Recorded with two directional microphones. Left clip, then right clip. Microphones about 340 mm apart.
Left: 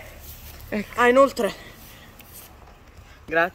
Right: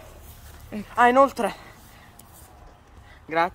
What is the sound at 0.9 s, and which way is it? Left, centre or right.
Speech, centre.